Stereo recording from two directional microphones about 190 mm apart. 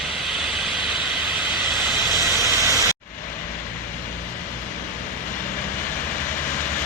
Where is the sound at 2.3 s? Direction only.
15° right (ahead or behind).